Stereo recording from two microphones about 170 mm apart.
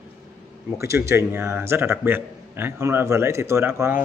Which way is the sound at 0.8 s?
15° right (ahead or behind).